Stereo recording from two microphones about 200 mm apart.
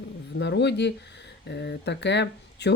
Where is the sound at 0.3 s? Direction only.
60° left (ahead or behind).